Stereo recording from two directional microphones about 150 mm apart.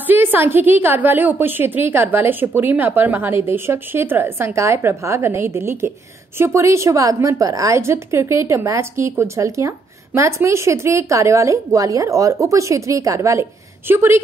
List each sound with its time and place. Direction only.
0.0 s a woman's voice: 10° right (ahead or behind)